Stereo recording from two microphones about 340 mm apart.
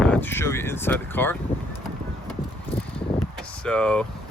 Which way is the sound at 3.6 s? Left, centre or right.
Centre.